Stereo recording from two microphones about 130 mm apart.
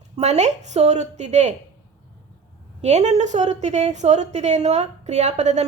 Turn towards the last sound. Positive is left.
turn(degrees=-60)  # may be behind; listen again after turning